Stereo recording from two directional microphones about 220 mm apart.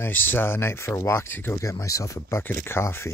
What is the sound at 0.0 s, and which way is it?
Speech, 10° left (ahead or behind).